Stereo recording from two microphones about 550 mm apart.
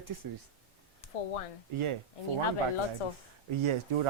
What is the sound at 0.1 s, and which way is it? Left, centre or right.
Speech, right.